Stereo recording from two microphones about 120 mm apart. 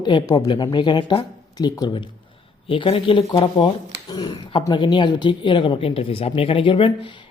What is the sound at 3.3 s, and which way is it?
Speech, 35° left (ahead or behind).